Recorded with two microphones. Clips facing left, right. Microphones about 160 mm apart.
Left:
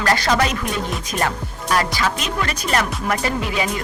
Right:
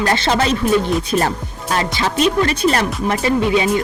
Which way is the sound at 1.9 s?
30° right (ahead or behind).